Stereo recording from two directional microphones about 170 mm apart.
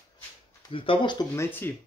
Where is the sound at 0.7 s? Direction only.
30° left (ahead or behind).